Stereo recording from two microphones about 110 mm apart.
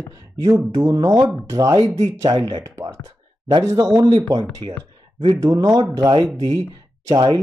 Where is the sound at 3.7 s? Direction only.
30° right (ahead or behind).